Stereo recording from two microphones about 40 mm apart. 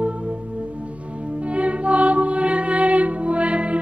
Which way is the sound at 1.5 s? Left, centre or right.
Right.